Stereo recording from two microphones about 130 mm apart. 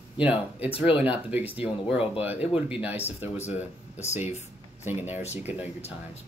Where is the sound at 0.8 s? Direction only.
10° right (ahead or behind).